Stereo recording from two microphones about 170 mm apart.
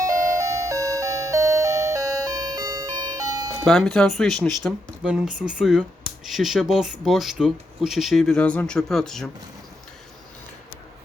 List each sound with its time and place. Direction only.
0.0 s music: 20° right (ahead or behind)
3.7 s speech: 5° left (ahead or behind)